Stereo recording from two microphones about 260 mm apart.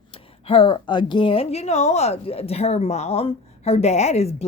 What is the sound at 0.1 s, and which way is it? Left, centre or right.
A woman's voice, left.